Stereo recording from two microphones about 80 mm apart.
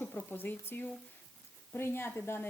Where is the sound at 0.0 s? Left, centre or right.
Left.